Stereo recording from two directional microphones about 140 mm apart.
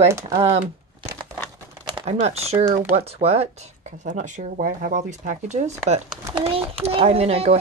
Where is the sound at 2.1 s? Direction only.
50° right (ahead or behind).